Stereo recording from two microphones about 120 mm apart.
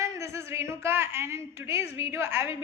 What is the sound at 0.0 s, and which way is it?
A woman's voice, 25° right (ahead or behind).